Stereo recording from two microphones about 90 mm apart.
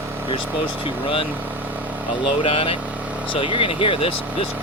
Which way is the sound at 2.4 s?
90° left.